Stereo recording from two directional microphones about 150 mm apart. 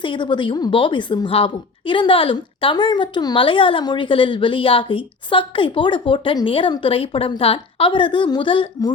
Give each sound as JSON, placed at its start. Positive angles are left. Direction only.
{"t": 0.0, "sound": "speech", "side_deg": 35}